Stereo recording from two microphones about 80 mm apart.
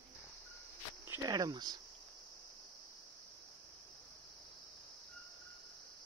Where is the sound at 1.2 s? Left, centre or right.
Right.